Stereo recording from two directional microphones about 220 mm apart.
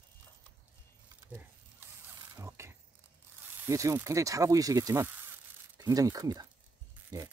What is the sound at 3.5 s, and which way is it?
Speech, 15° right (ahead or behind).